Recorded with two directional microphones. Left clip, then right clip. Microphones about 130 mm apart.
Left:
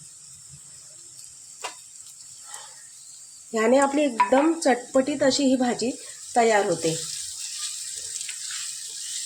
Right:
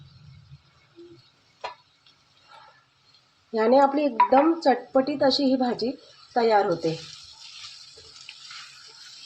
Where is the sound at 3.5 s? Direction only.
25° left (ahead or behind).